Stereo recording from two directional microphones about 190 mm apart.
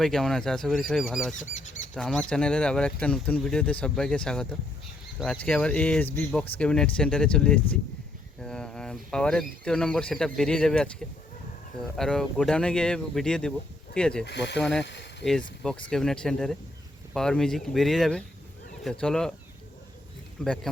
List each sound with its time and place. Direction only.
0.0 s speech: 5° left (ahead or behind)
1.4 s speech: 40° left (ahead or behind)
2.0 s speech: 5° left (ahead or behind)
11.9 s speech: 5° left (ahead or behind)
14.3 s speech: 65° left (ahead or behind)
14.6 s speech: centre (ahead or behind)
15.9 s speech: 5° left (ahead or behind)
20.4 s speech: 5° left (ahead or behind)